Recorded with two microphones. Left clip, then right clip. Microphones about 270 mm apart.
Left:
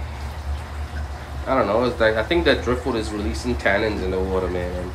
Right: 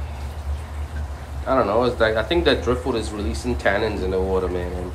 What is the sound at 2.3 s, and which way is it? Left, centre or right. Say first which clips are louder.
Speech: even; centre.